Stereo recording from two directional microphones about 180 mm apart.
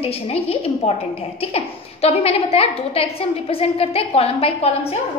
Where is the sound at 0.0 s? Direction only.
35° left (ahead or behind).